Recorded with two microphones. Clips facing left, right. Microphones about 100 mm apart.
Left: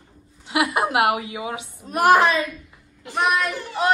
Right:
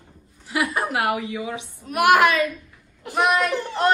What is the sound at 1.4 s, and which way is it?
A woman's voice, 35° left (ahead or behind).